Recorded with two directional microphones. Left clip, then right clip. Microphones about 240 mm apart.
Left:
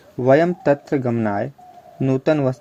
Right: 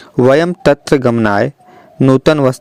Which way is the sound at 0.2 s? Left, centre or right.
Right.